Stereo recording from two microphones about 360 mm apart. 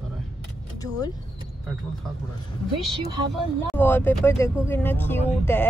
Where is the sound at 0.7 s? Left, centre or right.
Centre.